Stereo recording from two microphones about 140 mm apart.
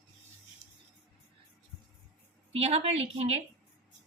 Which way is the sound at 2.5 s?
45° right (ahead or behind).